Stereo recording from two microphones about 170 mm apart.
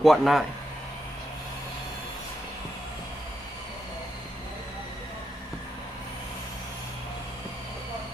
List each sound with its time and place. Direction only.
0.0 s a man's voice: centre (ahead or behind)